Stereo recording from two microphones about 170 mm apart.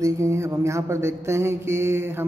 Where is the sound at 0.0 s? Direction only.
15° right (ahead or behind).